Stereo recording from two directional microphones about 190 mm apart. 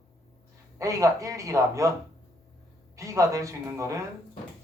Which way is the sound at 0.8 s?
15° right (ahead or behind).